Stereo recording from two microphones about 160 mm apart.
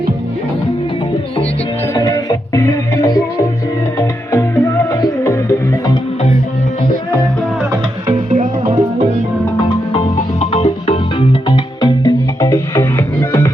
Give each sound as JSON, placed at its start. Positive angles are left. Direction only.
{"t": 1.9, "sound": "music", "side_deg": 20}
{"t": 8.1, "sound": "music", "side_deg": -45}
{"t": 10.4, "sound": "music", "side_deg": 40}